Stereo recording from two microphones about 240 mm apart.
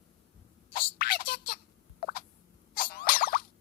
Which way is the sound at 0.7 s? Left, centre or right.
Left.